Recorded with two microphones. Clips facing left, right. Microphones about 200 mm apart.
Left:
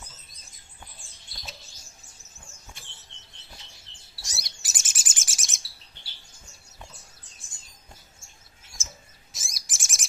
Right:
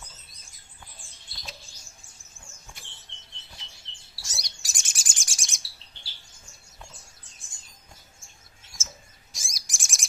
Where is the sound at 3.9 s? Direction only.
30° right (ahead or behind).